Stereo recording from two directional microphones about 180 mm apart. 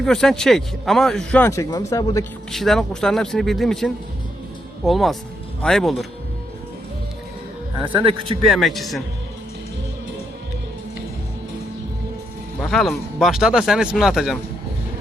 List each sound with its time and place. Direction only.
0.0 s speech: 5° left (ahead or behind); by 2.2 s 20° left (ahead or behind)
2.5 s speech: centre (ahead or behind)
8.4 s speech: centre (ahead or behind)
12.5 s speech: 5° left (ahead or behind)